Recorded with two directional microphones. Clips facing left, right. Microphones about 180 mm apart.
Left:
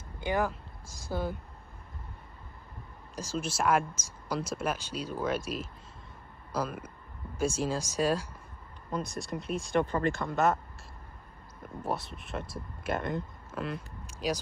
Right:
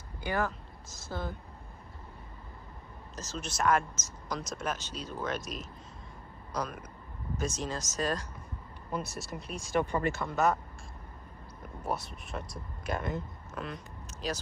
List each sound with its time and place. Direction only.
0.2 s speech: 15° left (ahead or behind)
3.2 s speech: 10° left (ahead or behind)
6.5 s a sound: 5° left (ahead or behind)
7.3 s speech: 10° left (ahead or behind)
8.9 s speech: 5° right (ahead or behind)
11.8 s speech: centre (ahead or behind)